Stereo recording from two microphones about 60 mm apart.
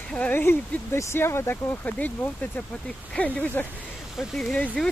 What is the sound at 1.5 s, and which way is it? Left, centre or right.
Speech, left.